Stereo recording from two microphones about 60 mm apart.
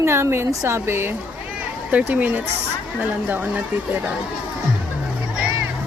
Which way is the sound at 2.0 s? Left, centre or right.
Right.